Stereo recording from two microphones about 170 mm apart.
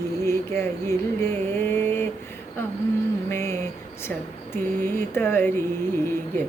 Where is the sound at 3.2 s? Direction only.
15° left (ahead or behind).